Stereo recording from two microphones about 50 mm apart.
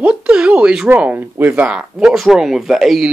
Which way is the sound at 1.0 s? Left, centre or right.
Right.